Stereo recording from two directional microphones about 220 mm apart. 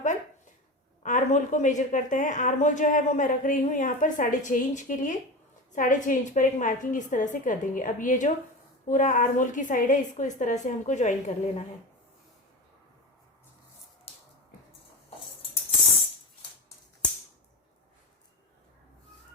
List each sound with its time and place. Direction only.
1.0 s a woman's voice: 35° left (ahead or behind)